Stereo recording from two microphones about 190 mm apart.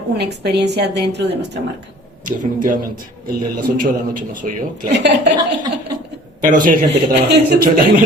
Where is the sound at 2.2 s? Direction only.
45° right (ahead or behind).